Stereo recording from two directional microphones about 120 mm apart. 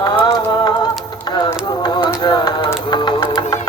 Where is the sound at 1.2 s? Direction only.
35° left (ahead or behind).